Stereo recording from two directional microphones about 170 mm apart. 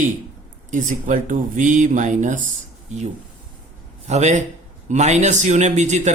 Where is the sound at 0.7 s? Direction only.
50° right (ahead or behind).